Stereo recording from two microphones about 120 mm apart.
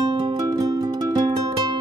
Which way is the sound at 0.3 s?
30° right (ahead or behind).